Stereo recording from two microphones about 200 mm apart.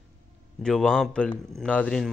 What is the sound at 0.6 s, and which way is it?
A man's voice, 5° left (ahead or behind).